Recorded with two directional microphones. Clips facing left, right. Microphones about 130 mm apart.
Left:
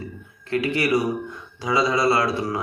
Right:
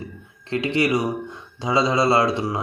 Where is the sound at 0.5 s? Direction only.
25° right (ahead or behind).